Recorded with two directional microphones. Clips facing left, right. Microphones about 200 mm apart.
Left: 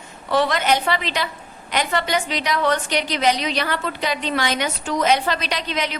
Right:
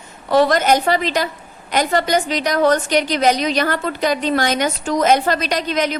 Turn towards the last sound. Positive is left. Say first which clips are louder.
# right 6 dB
turn(degrees=-45)  # may be behind; listen again after turning